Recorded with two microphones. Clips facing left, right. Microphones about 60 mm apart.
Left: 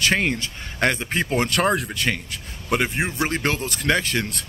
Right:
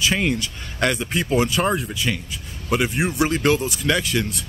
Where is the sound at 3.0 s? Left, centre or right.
Left.